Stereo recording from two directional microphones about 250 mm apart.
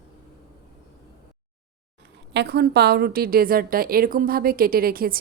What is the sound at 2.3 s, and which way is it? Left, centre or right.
A woman's voice, right.